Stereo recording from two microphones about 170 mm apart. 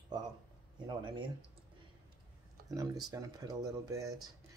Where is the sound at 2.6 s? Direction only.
20° right (ahead or behind).